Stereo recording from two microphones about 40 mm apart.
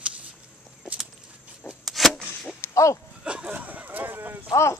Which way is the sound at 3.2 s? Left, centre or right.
Right.